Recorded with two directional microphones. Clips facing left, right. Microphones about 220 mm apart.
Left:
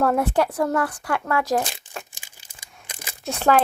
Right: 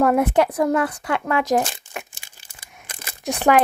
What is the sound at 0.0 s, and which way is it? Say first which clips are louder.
Speech: right 3 dB; 15° right (ahead or behind).